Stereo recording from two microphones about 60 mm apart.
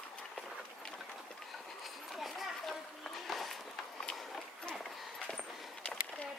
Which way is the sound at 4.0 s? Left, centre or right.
Centre.